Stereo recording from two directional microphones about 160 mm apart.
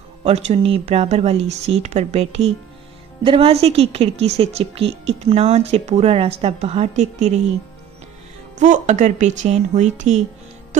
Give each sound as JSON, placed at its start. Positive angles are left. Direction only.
{"t": 0.2, "sound": "a woman's voice", "side_deg": -40}
{"t": 8.5, "sound": "speech", "side_deg": -50}